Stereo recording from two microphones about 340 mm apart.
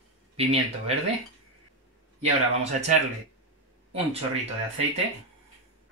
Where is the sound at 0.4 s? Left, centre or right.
Centre.